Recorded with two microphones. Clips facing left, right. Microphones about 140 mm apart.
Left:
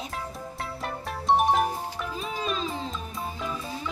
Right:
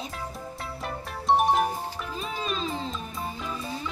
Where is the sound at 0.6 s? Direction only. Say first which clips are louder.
Left 2 dB; centre (ahead or behind).